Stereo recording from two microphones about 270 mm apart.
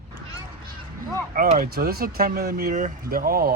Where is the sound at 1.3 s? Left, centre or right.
Right.